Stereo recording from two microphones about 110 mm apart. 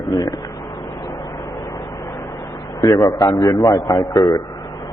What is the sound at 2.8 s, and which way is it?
A man's voice, 40° left (ahead or behind).